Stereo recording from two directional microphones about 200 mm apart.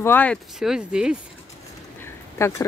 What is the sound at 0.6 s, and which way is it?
Speech, 5° right (ahead or behind).